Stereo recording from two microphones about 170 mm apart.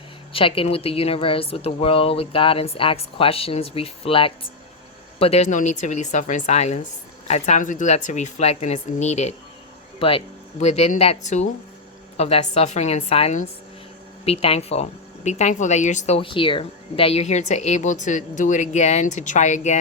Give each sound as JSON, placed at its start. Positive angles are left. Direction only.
{"t": 0.3, "sound": "speech", "side_deg": 35}